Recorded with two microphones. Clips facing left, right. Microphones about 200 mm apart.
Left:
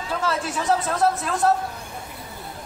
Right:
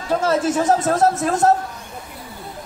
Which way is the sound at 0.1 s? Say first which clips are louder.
Right 8 dB; 45° right (ahead or behind).